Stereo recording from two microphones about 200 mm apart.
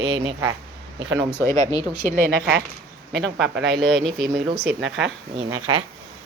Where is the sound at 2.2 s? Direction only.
50° right (ahead or behind).